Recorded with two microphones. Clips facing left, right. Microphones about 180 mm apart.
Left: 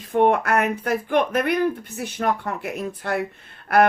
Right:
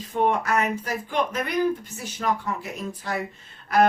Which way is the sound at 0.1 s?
60° left (ahead or behind).